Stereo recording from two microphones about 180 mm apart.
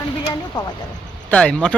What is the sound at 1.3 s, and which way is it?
Speech, 5° left (ahead or behind).